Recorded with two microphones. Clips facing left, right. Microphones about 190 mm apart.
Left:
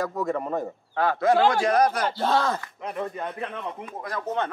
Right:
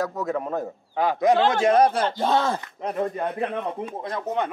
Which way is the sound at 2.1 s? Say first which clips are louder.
Right 1 dB; 15° right (ahead or behind).